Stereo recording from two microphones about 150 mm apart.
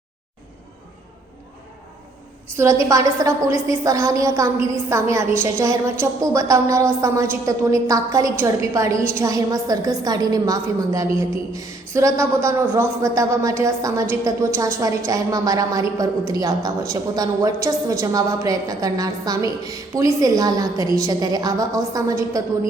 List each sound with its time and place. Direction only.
2.6 s a woman's voice: 20° right (ahead or behind)